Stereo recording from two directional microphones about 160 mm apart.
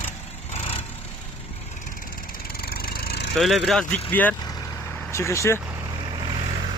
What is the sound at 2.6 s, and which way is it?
Vehicle, 70° left (ahead or behind).